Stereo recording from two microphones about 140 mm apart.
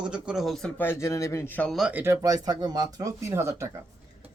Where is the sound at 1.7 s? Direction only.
5° right (ahead or behind).